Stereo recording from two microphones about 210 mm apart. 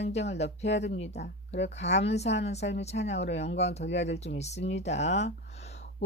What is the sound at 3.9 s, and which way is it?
Speech, 55° left (ahead or behind).